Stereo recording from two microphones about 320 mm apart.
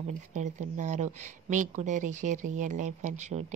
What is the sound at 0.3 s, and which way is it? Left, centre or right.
Speech, right.